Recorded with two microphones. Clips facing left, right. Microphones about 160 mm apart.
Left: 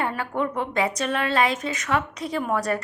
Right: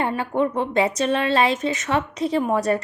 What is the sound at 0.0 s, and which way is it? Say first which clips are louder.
Speech: right 4 dB; 25° right (ahead or behind).